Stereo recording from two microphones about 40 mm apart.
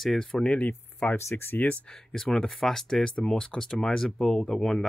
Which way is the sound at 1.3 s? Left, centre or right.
Left.